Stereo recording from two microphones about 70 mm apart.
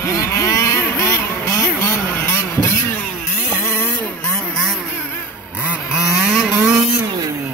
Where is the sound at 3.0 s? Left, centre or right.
Centre.